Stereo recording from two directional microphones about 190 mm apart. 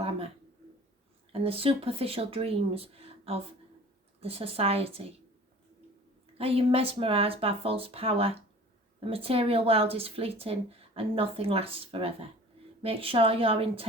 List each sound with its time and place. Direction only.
1.3 s speech: 30° right (ahead or behind)
6.3 s a woman's voice: 30° right (ahead or behind)